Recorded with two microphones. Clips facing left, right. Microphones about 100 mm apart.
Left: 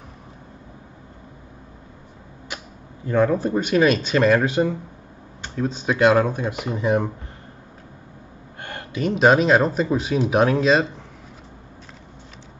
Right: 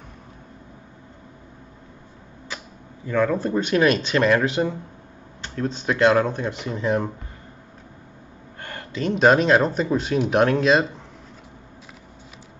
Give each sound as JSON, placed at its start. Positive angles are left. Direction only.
{"t": 3.1, "sound": "speech", "side_deg": 20}
{"t": 3.4, "sound": "speech", "side_deg": 5}
{"t": 8.5, "sound": "a sound", "side_deg": 20}
{"t": 9.1, "sound": "speech", "side_deg": 0}